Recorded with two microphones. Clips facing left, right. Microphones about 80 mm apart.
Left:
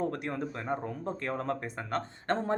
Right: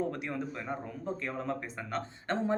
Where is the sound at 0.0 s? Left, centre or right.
Left.